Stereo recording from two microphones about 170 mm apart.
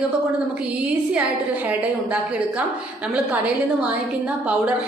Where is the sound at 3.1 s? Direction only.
5° right (ahead or behind).